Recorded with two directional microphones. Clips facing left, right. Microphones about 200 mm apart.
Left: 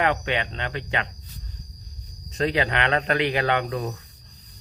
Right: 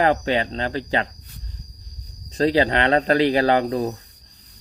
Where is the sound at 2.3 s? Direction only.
35° right (ahead or behind).